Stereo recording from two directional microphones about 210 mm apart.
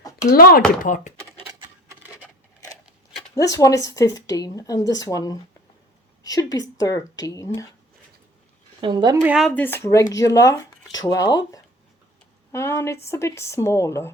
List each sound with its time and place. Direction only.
0.3 s speech: 45° left (ahead or behind)
3.3 s a woman's voice: 15° left (ahead or behind)
8.8 s a woman's voice: 20° right (ahead or behind)
9.2 s speech: 5° right (ahead or behind)
9.6 s a woman's voice: 10° left (ahead or behind)